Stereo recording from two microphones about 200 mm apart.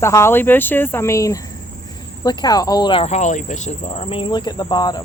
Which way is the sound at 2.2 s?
20° left (ahead or behind).